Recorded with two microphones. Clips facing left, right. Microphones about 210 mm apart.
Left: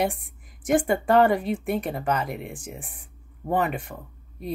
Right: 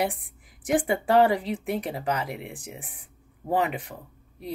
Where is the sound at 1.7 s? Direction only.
15° right (ahead or behind).